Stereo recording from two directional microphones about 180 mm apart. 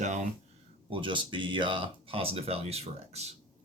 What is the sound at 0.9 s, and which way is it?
Speech, 25° right (ahead or behind).